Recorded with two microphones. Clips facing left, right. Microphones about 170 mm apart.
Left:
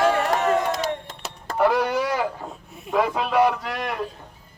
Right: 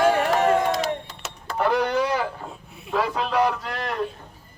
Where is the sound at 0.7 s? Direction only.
45° left (ahead or behind).